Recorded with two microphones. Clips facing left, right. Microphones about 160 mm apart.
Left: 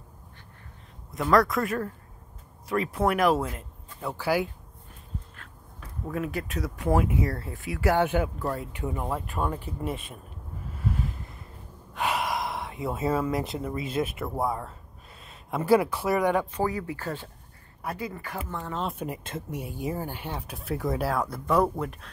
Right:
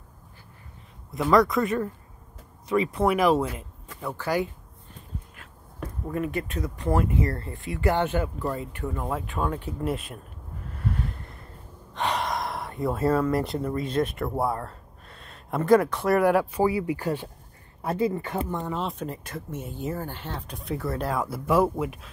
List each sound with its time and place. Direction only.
1.3 s speech: centre (ahead or behind)
6.0 s speech: centre (ahead or behind); by 9.0 s 15° left (ahead or behind)
9.0 s speech: centre (ahead or behind)
10.7 s a sound: centre (ahead or behind)
11.9 s speech: 10° left (ahead or behind); by 17.3 s 15° right (ahead or behind)
17.8 s speech: 25° right (ahead or behind)
18.8 s speech: centre (ahead or behind)
20.8 s speech: 15° left (ahead or behind)
21.1 s speech: 5° right (ahead or behind)